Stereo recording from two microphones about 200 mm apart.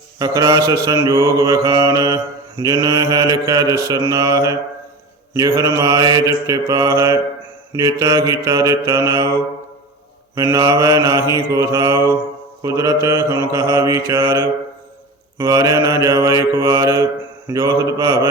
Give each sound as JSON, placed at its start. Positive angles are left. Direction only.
{"t": 0.2, "sound": "mantra", "side_deg": -20}
{"t": 10.3, "sound": "mantra", "side_deg": -15}